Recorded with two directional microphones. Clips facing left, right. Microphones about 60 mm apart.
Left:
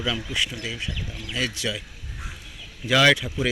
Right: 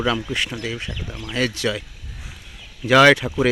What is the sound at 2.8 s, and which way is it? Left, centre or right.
Speech, right.